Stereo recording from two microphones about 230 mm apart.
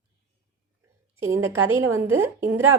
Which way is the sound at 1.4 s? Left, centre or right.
Right.